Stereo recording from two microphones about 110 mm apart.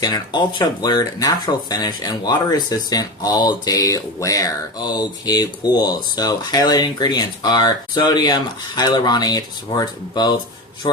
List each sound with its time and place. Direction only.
0.6 s speech: 40° left (ahead or behind)